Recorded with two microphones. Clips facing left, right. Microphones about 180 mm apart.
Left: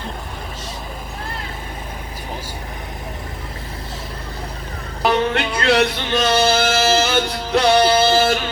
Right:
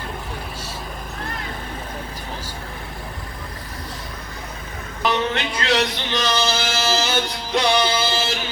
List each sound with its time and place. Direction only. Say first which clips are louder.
5.0 s music: left 4 dB; 60° left (ahead or behind)